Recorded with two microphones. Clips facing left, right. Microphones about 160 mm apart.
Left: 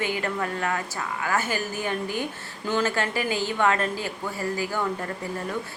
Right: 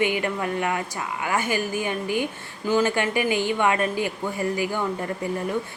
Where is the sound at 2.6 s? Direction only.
15° right (ahead or behind).